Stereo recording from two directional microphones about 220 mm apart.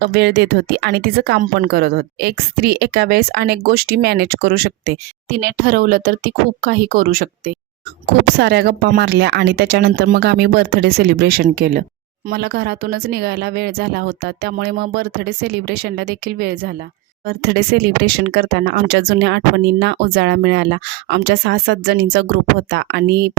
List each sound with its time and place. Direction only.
0.0 s speech: 50° right (ahead or behind)